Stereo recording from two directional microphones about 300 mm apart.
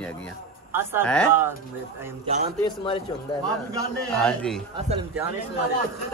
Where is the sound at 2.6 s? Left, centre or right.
Centre.